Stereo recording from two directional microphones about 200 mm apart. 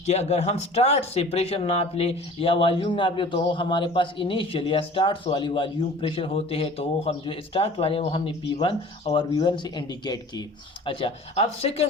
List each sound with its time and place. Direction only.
0.0 s speech: 30° left (ahead or behind)